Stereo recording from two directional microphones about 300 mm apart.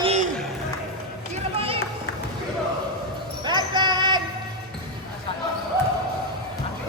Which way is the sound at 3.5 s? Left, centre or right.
Centre.